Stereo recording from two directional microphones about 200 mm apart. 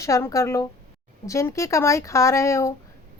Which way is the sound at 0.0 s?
15° left (ahead or behind).